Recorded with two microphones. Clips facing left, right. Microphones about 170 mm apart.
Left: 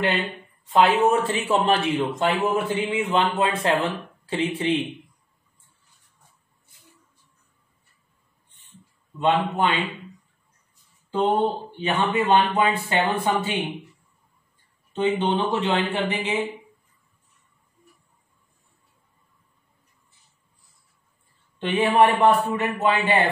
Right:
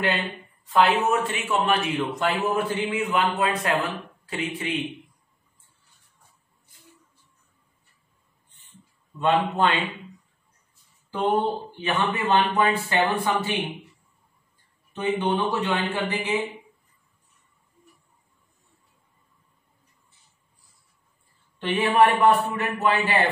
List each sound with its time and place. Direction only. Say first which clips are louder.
0.7 s a man's voice: left 2 dB; 30° left (ahead or behind)
9.2 s a man's voice: even; 15° left (ahead or behind)
11.8 s a man's voice: left 3 dB; 25° left (ahead or behind)
14.9 s a man's voice: left 2 dB; 25° left (ahead or behind)
21.5 s a man's voice: left 1 dB; 20° left (ahead or behind)